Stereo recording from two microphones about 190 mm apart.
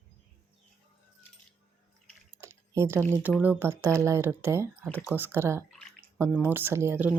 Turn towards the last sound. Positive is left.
turn(degrees=-10)  # may be behind; listen again after turning